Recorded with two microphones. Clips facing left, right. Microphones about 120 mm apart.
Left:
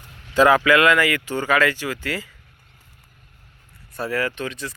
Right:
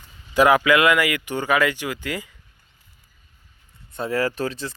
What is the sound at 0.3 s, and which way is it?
Speech, 15° right (ahead or behind).